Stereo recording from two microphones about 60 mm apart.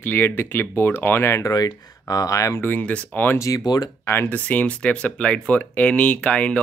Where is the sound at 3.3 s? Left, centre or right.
Left.